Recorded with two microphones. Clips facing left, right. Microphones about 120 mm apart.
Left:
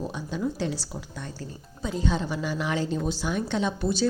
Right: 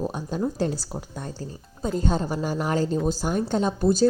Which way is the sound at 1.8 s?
45° right (ahead or behind).